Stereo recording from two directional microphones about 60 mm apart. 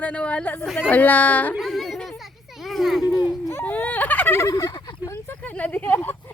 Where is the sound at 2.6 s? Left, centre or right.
Centre.